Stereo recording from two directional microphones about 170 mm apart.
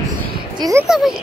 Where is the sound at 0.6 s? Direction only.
20° right (ahead or behind).